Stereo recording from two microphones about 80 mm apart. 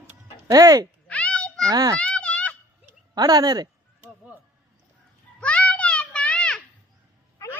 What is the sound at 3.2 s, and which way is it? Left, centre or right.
Speech, right.